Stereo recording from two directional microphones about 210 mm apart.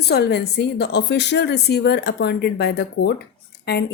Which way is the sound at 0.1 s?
50° left (ahead or behind).